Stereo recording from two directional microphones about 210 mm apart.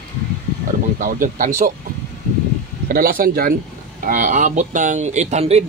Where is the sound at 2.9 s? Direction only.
45° right (ahead or behind).